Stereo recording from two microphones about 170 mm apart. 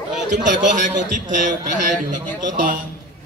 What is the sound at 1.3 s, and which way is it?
Speech, 50° right (ahead or behind).